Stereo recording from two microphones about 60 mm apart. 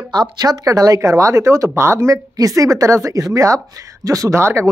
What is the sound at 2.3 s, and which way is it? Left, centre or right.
Speech, right.